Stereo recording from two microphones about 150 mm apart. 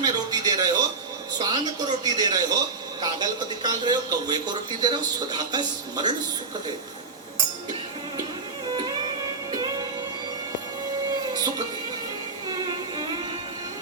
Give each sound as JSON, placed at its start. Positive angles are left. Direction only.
{"t": 0.0, "sound": "a sound", "side_deg": -25}
{"t": 1.4, "sound": "a man's voice", "side_deg": -25}
{"t": 8.7, "sound": "music", "side_deg": -30}
{"t": 11.3, "sound": "music", "side_deg": -25}